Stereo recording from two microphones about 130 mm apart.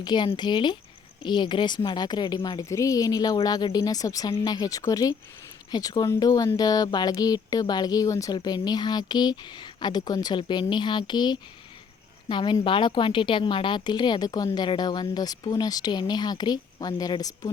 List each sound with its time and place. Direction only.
0.0 s a woman's voice: 35° left (ahead or behind)